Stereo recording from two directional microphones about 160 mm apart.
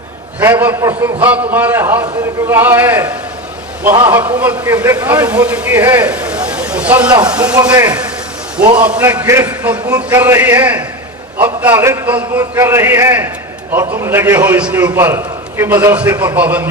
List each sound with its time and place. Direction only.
0.6 s a man's voice: 15° right (ahead or behind)
7.5 s speech: 25° right (ahead or behind)
8.7 s a man's voice: 10° right (ahead or behind)